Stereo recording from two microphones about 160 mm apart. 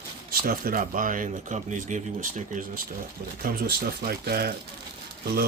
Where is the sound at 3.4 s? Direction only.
70° right (ahead or behind).